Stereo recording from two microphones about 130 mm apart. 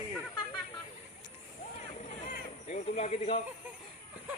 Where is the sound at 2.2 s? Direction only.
60° left (ahead or behind).